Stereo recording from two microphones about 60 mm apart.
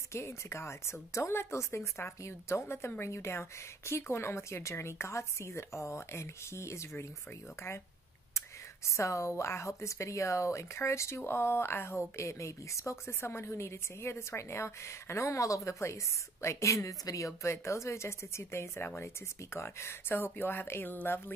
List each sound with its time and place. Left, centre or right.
0.1 s speech: left
8.4 s speech: left